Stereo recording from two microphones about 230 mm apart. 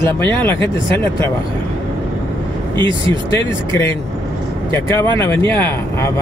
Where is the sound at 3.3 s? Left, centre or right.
Centre.